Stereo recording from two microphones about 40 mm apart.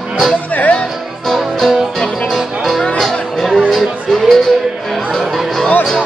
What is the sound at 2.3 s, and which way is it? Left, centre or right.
Music, centre.